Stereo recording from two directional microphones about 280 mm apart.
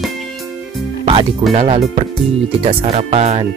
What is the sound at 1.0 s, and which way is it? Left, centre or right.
Music, right.